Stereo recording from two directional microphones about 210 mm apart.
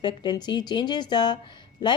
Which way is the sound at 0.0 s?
20° left (ahead or behind).